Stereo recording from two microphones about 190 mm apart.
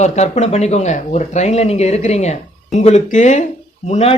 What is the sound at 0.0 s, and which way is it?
A man's voice, 35° left (ahead or behind).